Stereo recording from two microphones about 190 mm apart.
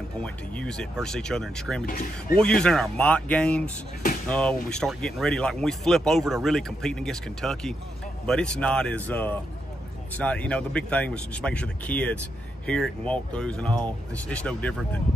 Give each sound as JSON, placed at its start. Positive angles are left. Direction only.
{"t": 0.2, "sound": "speech", "side_deg": 5}
{"t": 1.9, "sound": "speech", "side_deg": 45}
{"t": 2.3, "sound": "speech", "side_deg": 5}